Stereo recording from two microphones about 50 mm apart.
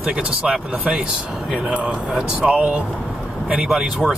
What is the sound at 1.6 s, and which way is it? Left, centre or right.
Speech, right.